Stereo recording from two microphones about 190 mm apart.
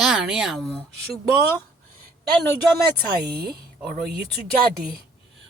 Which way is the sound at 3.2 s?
55° right (ahead or behind).